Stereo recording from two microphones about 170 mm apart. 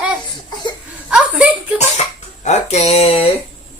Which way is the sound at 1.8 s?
45° left (ahead or behind).